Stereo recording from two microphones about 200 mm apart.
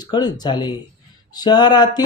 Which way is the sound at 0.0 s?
20° left (ahead or behind).